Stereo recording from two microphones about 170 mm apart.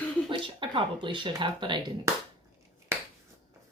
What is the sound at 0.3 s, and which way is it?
Speech, 30° right (ahead or behind).